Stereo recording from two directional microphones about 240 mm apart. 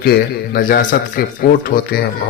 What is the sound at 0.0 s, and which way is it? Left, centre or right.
Speech, left.